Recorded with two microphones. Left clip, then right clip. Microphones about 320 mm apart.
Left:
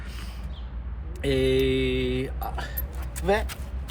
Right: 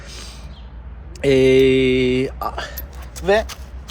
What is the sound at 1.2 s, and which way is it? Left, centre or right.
Speech, centre.